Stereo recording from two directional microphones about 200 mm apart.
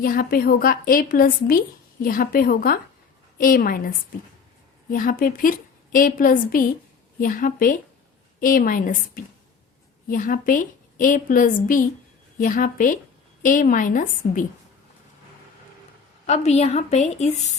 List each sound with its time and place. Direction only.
0.0 s a woman's voice: 45° left (ahead or behind)
16.2 s a woman's voice: 35° left (ahead or behind)